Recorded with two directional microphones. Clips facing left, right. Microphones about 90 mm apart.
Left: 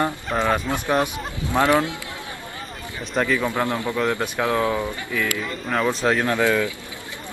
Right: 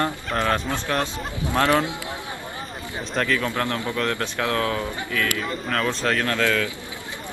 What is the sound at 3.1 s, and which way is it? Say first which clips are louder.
Speech: left 2 dB; 10° left (ahead or behind).